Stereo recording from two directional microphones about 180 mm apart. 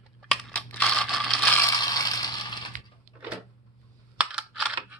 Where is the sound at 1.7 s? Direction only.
20° left (ahead or behind).